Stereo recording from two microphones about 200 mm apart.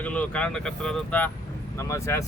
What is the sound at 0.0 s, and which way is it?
Speech, 5° left (ahead or behind).